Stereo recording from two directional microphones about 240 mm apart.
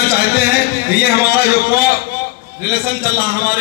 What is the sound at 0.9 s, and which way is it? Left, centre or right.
A man's voice, left.